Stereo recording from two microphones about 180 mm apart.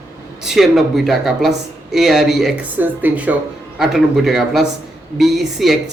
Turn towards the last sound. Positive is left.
turn(degrees=0)  # may be behind; listen again after turning